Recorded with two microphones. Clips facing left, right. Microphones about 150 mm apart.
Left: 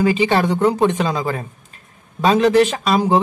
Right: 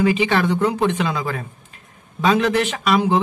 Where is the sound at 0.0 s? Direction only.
35° left (ahead or behind).